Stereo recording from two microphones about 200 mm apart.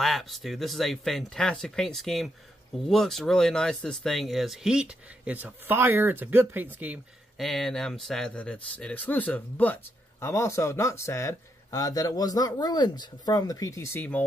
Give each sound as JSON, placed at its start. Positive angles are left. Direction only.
{"t": 0.0, "sound": "speech", "side_deg": 0}